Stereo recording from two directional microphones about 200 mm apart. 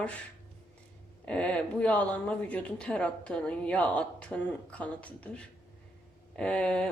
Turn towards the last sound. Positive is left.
turn(degrees=5)  # may be behind; listen again after turning